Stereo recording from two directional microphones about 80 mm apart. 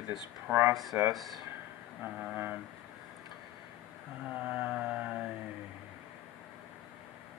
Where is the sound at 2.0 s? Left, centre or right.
Centre.